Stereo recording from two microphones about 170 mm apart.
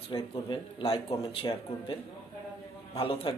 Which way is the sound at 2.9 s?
30° left (ahead or behind).